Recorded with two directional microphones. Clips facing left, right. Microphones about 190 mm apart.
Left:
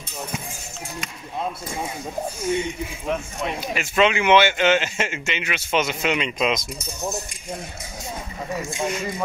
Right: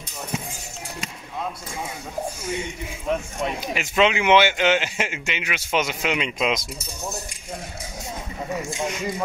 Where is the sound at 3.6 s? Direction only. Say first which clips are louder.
Left 1 dB; 15° right (ahead or behind).